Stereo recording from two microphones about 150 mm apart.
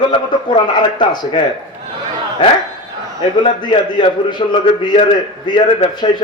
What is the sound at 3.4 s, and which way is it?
A man's voice, 30° left (ahead or behind).